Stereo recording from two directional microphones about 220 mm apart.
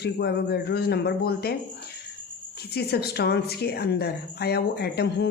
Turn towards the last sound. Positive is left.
turn(degrees=45)  # may be behind; listen again after turning